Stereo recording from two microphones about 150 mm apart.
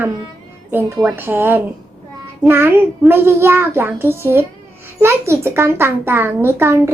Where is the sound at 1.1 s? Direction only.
15° right (ahead or behind).